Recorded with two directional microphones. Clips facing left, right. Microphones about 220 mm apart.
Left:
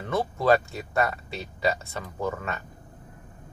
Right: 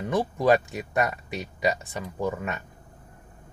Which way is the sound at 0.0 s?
15° right (ahead or behind).